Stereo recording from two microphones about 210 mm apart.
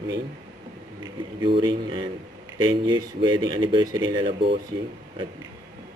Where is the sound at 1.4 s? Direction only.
20° right (ahead or behind).